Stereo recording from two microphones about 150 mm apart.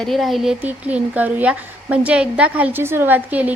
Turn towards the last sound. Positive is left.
turn(degrees=-10)  # may be behind; listen again after turning